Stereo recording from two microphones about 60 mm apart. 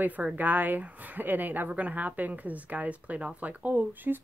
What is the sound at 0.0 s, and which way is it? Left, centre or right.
Speech, right.